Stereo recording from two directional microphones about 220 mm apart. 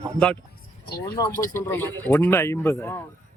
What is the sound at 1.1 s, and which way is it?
Speech, 15° left (ahead or behind).